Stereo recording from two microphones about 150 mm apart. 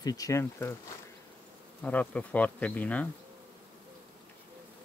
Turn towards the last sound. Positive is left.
turn(degrees=10)  # may be behind; listen again after turning